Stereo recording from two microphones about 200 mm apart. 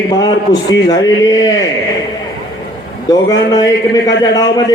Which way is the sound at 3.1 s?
20° left (ahead or behind).